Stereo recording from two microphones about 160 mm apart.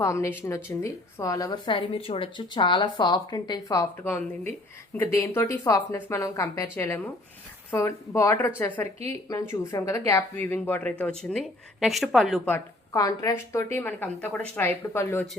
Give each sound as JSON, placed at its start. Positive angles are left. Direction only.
{"t": 0.0, "sound": "a woman's voice", "side_deg": 15}
{"t": 12.5, "sound": "a woman's voice", "side_deg": 15}